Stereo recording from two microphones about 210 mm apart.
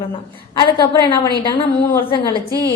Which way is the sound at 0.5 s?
20° left (ahead or behind).